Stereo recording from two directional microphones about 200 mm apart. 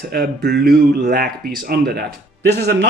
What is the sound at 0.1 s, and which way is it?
Speech, 50° right (ahead or behind).